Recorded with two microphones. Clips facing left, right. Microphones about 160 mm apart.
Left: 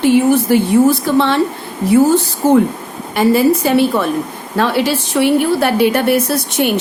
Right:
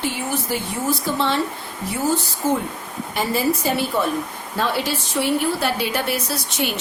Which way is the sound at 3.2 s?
70° left (ahead or behind).